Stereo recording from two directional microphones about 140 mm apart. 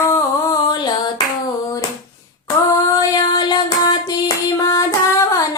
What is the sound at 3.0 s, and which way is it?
Child singing, 30° left (ahead or behind).